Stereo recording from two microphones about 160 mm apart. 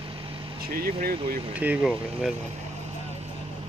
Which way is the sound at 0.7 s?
70° right (ahead or behind).